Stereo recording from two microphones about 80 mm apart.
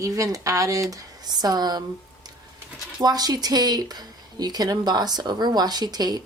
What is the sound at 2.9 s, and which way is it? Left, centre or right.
Speech, right.